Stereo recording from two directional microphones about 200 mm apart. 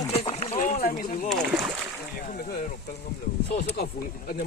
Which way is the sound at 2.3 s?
50° left (ahead or behind).